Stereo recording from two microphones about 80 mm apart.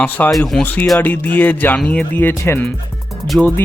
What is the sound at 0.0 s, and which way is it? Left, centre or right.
Speech, left.